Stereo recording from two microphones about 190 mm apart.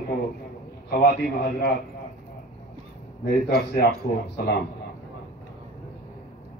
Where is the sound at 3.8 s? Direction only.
60° left (ahead or behind).